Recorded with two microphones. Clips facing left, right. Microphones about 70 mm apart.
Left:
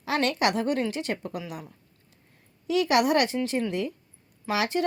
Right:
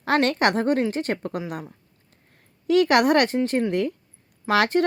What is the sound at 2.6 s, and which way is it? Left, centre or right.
A woman's voice, right.